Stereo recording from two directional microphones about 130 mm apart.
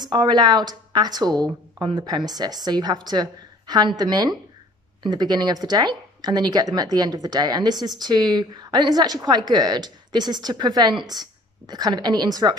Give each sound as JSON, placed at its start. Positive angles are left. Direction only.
{"t": 0.1, "sound": "a woman's voice", "side_deg": -35}